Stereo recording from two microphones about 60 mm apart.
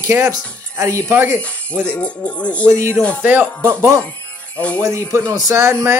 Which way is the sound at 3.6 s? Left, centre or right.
Right.